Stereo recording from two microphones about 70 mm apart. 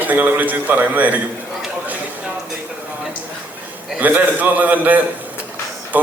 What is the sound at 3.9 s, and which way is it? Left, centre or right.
A man's voice, right.